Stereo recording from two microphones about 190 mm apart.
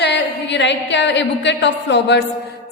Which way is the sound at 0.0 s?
65° left (ahead or behind).